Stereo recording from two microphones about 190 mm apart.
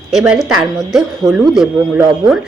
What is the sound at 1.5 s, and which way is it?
Speech, centre (ahead or behind).